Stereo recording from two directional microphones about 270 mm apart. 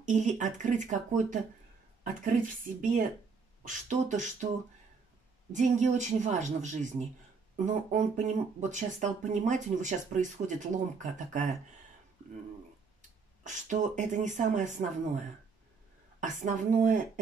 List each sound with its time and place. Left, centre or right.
0.0 s speech: right
3.6 s speech: right
5.5 s speech: right
13.4 s speech: right